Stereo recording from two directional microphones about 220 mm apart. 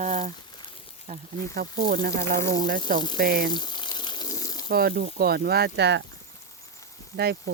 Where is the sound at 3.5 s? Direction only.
20° left (ahead or behind).